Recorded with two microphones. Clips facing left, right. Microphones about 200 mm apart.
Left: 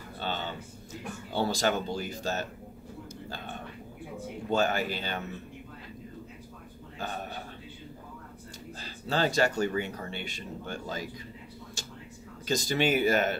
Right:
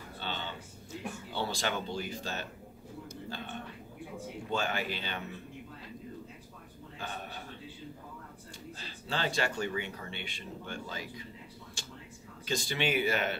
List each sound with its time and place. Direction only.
0.2 s a sound: 45° left (ahead or behind)
1.3 s speech: 40° left (ahead or behind)
4.5 s speech: 45° left (ahead or behind)
8.7 s speech: 40° left (ahead or behind)
11.8 s a sound: 40° left (ahead or behind)
12.4 s speech: 40° left (ahead or behind)